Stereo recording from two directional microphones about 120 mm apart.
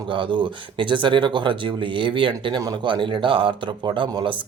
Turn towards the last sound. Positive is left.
turn(degrees=-40)  # may be behind; listen again after turning